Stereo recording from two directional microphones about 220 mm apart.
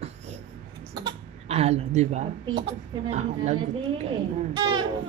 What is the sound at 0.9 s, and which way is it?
Cough, 25° right (ahead or behind).